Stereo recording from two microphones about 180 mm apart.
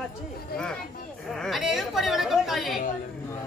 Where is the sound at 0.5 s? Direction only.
55° left (ahead or behind).